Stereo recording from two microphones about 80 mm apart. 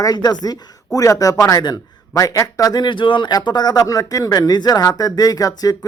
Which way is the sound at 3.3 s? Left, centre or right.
Left.